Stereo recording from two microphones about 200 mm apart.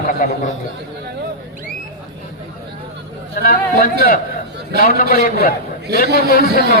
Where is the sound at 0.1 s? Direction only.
45° left (ahead or behind).